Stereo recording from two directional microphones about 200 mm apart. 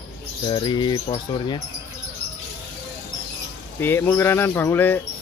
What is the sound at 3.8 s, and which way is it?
Speech, 10° left (ahead or behind).